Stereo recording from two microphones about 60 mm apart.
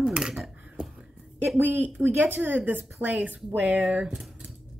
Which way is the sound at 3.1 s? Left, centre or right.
Centre.